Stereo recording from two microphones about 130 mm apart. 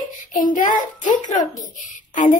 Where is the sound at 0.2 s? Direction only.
90° left.